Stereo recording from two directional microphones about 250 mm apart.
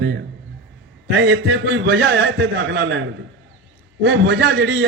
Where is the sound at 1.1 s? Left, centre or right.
Right.